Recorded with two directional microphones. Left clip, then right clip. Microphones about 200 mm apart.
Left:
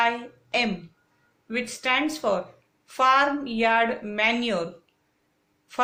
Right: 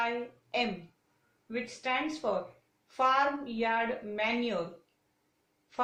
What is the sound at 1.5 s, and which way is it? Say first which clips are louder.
A woman's voice: left 8 dB; 35° left (ahead or behind).